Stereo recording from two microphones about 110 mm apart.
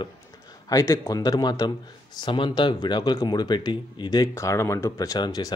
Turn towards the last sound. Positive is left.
turn(degrees=35)  # may be behind; listen again after turning